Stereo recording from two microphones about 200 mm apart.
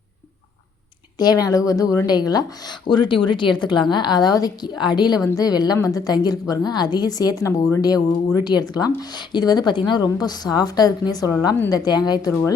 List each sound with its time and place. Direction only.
1.2 s speech: 20° left (ahead or behind)